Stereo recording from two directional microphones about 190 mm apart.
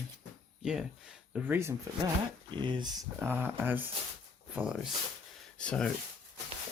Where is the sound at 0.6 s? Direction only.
5° right (ahead or behind).